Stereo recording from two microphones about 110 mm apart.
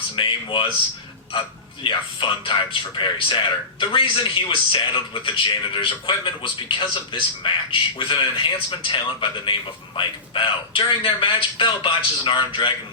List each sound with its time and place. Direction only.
0.2 s a man's voice: 50° left (ahead or behind)
1.8 s a man's voice: 50° left (ahead or behind)